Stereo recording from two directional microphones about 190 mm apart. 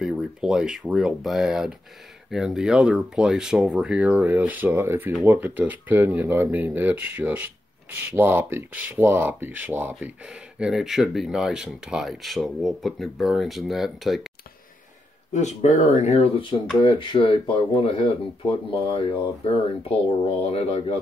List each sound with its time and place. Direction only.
0.0 s speech: 5° right (ahead or behind)
15.3 s speech: 40° left (ahead or behind)